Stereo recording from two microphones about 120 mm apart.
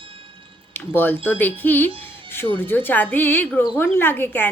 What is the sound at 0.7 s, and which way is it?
A woman's voice, 15° left (ahead or behind).